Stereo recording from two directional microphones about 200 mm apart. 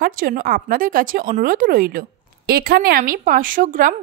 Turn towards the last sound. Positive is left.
turn(degrees=-40)  # may be behind; listen again after turning